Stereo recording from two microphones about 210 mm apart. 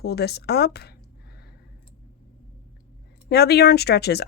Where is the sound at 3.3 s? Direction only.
50° left (ahead or behind).